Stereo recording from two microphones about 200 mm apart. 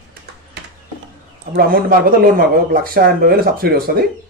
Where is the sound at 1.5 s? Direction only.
50° right (ahead or behind).